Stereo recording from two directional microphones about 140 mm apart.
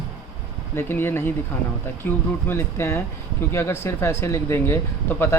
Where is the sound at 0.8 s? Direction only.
15° left (ahead or behind).